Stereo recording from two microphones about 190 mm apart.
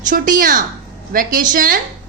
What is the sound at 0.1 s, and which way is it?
A woman's voice, 45° right (ahead or behind).